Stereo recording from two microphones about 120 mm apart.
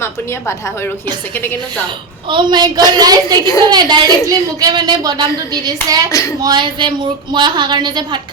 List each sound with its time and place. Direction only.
2.3 s a woman's voice: 40° right (ahead or behind)
6.1 s speech: 30° left (ahead or behind)
6.4 s a woman's voice: 40° right (ahead or behind)